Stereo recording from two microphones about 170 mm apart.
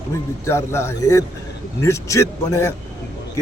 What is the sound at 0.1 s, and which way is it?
A man's voice, 15° left (ahead or behind).